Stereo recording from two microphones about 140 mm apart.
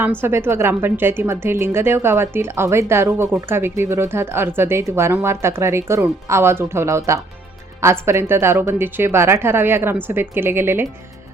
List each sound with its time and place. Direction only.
0.0 s a woman's voice: 15° right (ahead or behind)